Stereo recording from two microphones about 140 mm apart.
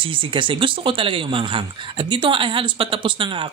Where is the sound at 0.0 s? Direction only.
40° right (ahead or behind).